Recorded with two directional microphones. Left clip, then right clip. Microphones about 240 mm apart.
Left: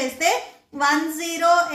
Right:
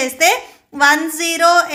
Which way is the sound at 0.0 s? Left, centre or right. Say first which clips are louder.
Right 7 dB; right.